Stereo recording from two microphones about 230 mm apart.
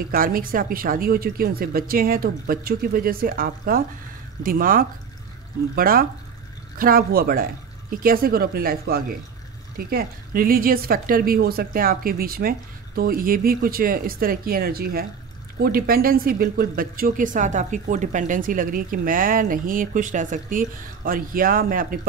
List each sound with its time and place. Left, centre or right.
0.1 s speech: right